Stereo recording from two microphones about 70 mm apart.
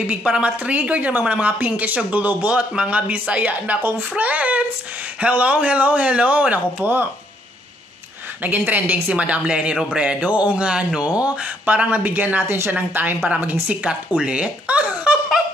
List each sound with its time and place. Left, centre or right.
0.0 s a woman's voice: centre
8.4 s a woman's voice: right